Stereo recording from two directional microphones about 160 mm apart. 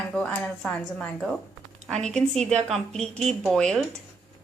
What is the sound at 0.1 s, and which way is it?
Speech, 5° left (ahead or behind).